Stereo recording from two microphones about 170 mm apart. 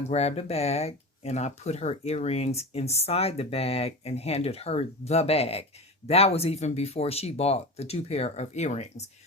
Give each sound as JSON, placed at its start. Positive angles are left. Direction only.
{"t": 0.0, "sound": "speech", "side_deg": 40}